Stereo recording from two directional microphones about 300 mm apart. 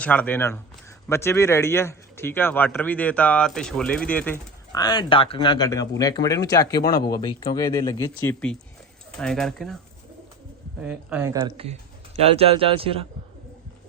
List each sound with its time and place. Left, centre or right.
0.0 s speech: centre
10.8 s speech: centre